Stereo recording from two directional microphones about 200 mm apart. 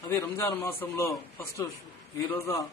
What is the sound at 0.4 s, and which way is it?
A man's voice, 10° left (ahead or behind).